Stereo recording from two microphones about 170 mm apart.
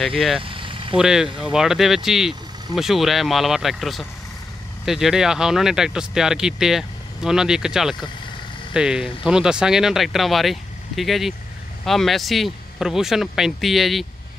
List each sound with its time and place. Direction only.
0.4 s vehicle: 30° right (ahead or behind)
0.9 s speech: 5° right (ahead or behind)